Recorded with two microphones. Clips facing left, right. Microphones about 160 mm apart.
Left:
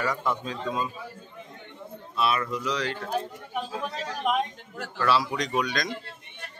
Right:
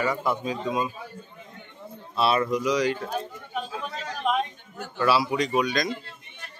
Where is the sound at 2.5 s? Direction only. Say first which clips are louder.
Right 6 dB; 15° right (ahead or behind).